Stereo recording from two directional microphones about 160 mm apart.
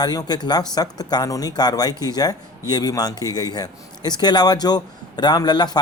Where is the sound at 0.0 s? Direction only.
25° left (ahead or behind).